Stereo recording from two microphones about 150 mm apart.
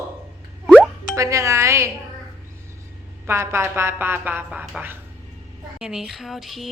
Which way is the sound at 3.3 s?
15° right (ahead or behind).